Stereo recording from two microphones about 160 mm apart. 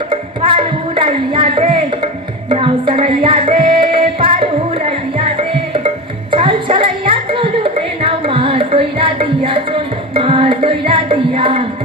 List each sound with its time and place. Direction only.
0.1 s music: 30° right (ahead or behind)